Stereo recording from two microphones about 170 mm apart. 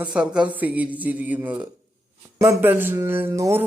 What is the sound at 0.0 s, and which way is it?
A man's voice, 5° right (ahead or behind).